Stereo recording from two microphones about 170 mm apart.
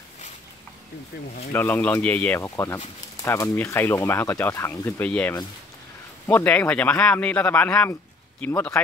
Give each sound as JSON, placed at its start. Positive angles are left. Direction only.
{"t": 1.5, "sound": "speech", "side_deg": 10}